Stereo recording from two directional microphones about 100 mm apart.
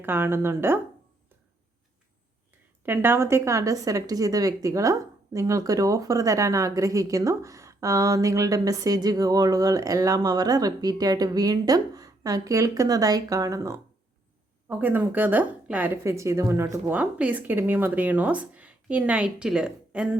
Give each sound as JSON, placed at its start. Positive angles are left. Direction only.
{"t": 0.0, "sound": "a woman's voice", "side_deg": -20}
{"t": 2.8, "sound": "a woman's voice", "side_deg": -20}
{"t": 14.7, "sound": "speech", "side_deg": -20}
{"t": 16.0, "sound": "a woman's voice", "side_deg": -30}
{"t": 16.9, "sound": "speech", "side_deg": -15}